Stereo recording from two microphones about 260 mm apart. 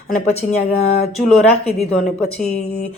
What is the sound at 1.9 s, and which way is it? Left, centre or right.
Speech, centre.